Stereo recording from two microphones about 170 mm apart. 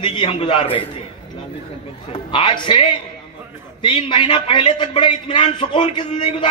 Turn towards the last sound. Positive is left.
turn(degrees=30)  # may be behind; listen again after turning